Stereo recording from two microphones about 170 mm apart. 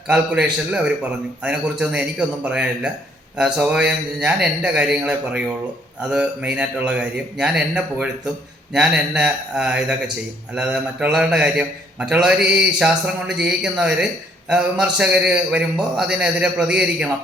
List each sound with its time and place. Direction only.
0.1 s a man's voice: 5° right (ahead or behind)